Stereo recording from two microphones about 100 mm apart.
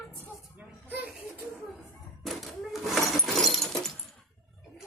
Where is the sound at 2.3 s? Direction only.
Centre (ahead or behind).